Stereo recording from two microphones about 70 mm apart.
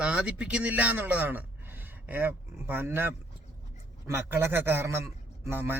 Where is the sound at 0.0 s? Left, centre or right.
Centre.